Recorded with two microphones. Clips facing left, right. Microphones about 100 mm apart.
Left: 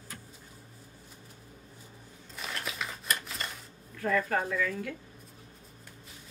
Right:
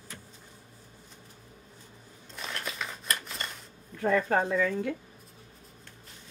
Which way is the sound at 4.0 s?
25° right (ahead or behind).